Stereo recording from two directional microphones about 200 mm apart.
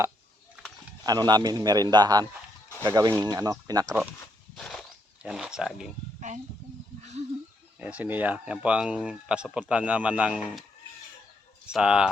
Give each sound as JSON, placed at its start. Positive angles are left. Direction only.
{"t": 1.0, "sound": "a man's voice", "side_deg": -20}
{"t": 4.5, "sound": "a sound", "side_deg": 0}
{"t": 6.1, "sound": "speech", "side_deg": -35}
{"t": 7.0, "sound": "a sound", "side_deg": -35}
{"t": 7.8, "sound": "speech", "side_deg": -5}
{"t": 11.7, "sound": "speech", "side_deg": -5}